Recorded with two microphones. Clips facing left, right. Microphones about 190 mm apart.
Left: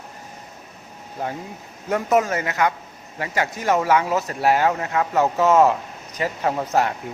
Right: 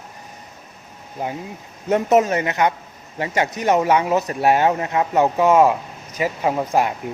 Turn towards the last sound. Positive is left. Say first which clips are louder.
# right 2 dB
turn(degrees=-15)  # may be behind; listen again after turning